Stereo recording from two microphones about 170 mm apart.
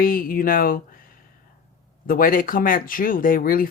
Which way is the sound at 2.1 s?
55° left (ahead or behind).